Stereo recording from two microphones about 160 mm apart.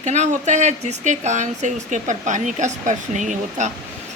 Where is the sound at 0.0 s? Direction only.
45° right (ahead or behind).